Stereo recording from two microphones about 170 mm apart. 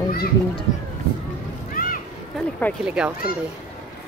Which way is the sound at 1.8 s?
60° left (ahead or behind).